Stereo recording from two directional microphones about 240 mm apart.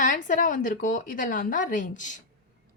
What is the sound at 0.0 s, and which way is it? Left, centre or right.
A woman's voice, left.